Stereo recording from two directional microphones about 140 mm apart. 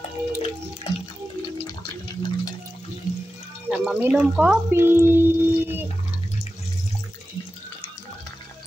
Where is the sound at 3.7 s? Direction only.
10° right (ahead or behind).